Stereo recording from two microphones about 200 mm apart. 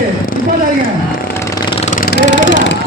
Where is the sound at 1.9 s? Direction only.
45° left (ahead or behind).